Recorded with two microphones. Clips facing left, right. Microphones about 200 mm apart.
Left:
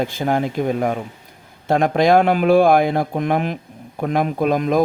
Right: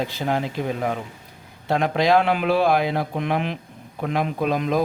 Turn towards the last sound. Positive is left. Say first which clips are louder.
# left 4 dB
turn(degrees=50)  # may be behind; listen again after turning